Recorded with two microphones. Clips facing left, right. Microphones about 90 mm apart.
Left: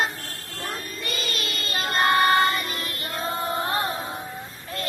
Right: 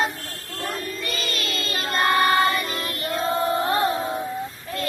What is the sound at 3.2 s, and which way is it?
Chant, 30° right (ahead or behind).